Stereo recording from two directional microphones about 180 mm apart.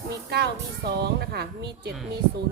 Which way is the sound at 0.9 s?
60° right (ahead or behind).